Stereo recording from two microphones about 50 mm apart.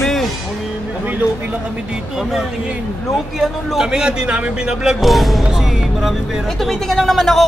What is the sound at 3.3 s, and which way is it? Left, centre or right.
A man's voice, centre.